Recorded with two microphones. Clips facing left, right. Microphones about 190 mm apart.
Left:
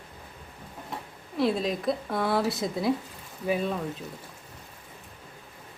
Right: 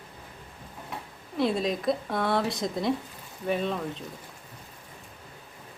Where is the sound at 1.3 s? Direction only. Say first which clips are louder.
Even; centre (ahead or behind).